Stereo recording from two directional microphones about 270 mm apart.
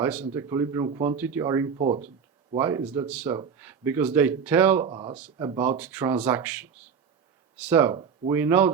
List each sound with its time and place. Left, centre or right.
0.0 s speech: centre
2.6 s speech: centre
4.9 s speech: centre
5.1 s speech: centre
7.7 s speech: centre